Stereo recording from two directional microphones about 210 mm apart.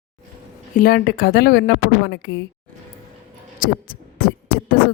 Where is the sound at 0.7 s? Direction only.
45° left (ahead or behind).